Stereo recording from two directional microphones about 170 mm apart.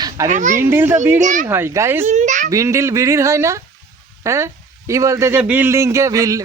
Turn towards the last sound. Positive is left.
turn(degrees=-20)  # may be behind; listen again after turning